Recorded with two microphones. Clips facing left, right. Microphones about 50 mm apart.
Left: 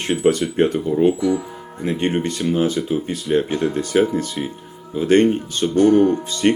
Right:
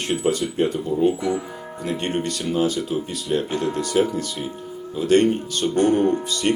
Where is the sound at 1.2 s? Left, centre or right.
Right.